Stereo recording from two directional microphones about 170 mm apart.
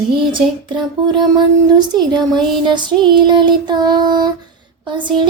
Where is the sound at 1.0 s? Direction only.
25° right (ahead or behind).